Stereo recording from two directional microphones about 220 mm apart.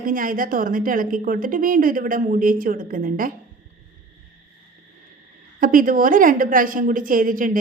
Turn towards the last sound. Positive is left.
turn(degrees=-40)  # may be behind; listen again after turning